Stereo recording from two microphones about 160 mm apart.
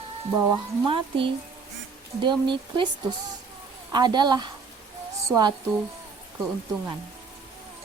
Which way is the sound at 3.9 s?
25° right (ahead or behind).